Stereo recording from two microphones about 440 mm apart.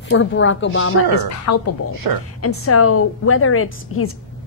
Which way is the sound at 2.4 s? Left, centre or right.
Left.